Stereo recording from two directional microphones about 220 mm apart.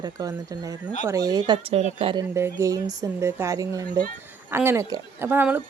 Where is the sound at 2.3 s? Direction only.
15° right (ahead or behind).